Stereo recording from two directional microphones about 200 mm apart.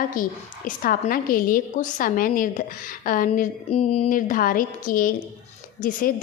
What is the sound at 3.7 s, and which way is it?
A woman's voice, 30° left (ahead or behind).